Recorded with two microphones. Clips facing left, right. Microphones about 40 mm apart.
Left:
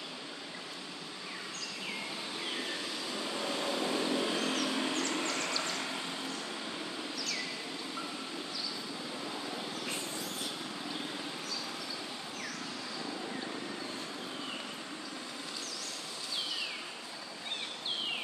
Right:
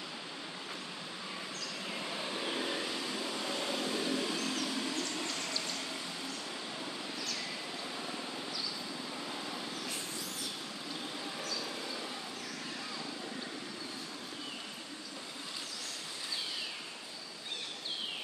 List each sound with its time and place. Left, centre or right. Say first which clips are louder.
2.2 s vehicle: right 3 dB; centre
3.2 s vehicle: left 1 dB; centre
3.8 s vehicle: left 4 dB; left
4.6 s a sound: left 3 dB; left
9.2 s vehicle: left 1 dB; centre